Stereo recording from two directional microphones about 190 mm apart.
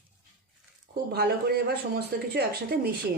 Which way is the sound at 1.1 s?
55° right (ahead or behind).